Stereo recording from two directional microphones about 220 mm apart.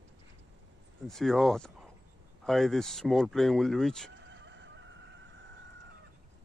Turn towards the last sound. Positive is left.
turn(degrees=-55)  # may be behind; listen again after turning